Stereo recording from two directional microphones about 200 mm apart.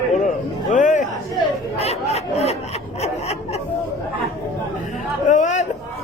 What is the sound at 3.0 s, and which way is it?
Snicker, 30° left (ahead or behind).